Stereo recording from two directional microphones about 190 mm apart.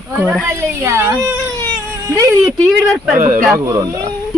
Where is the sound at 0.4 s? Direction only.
15° right (ahead or behind).